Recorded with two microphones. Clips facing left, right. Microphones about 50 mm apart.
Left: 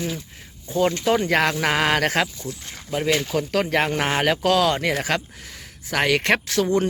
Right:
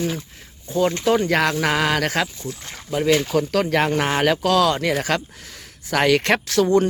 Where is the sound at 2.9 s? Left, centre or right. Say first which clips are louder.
Right 3 dB; centre.